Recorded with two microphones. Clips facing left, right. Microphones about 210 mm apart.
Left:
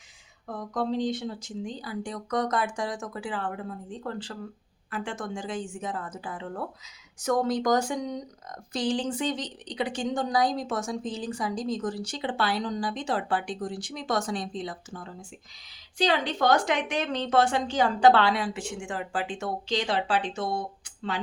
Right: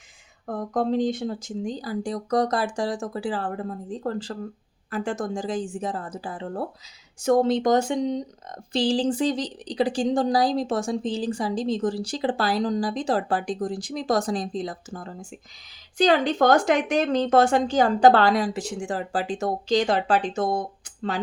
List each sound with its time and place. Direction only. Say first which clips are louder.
0.4 s a woman's voice: right 5 dB; 50° right (ahead or behind)